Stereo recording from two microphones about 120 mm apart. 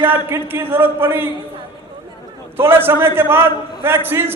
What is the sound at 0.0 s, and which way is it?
A man's voice, 15° right (ahead or behind).